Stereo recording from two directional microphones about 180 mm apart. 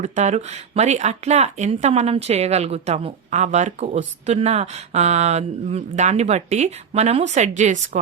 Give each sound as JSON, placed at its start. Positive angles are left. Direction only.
{"t": 0.0, "sound": "speech", "side_deg": -40}